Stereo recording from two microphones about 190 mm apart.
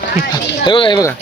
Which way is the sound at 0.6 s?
25° left (ahead or behind).